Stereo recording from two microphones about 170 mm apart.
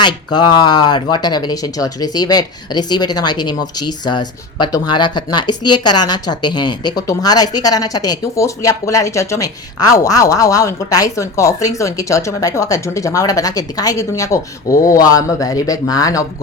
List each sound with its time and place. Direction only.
0.0 s speech: 25° left (ahead or behind)